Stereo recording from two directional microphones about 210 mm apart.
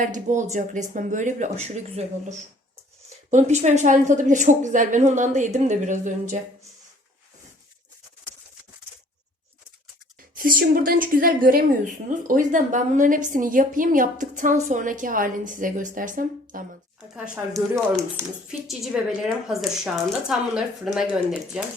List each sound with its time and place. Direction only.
0.0 s a woman's voice: 35° right (ahead or behind)
10.3 s a woman's voice: 45° right (ahead or behind)
17.2 s speech: 5° right (ahead or behind)